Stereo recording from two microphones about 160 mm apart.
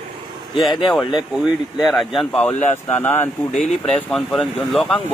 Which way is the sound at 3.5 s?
Centre (ahead or behind).